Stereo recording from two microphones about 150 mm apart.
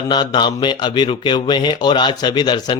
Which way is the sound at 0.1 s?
30° left (ahead or behind).